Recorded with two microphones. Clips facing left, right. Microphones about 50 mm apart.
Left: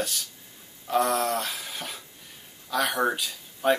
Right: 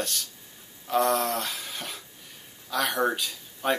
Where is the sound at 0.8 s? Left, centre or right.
Centre.